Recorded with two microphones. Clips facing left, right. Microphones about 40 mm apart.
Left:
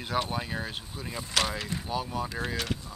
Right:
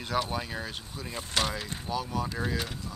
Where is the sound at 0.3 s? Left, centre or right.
Centre.